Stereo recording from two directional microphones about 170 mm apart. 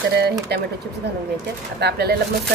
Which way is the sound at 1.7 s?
75° right (ahead or behind).